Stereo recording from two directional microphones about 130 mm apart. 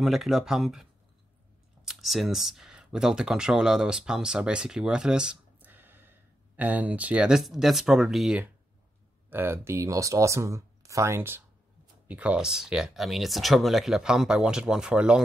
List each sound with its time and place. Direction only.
0.0 s speech: centre (ahead or behind)
1.9 s speech: centre (ahead or behind)
9.3 s speech: 15° right (ahead or behind)